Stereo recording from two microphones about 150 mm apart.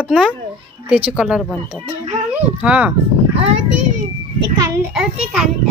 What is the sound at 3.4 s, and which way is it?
Speech, 50° right (ahead or behind).